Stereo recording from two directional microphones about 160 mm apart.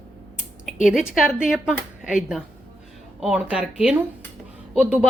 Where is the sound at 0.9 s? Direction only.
Centre (ahead or behind).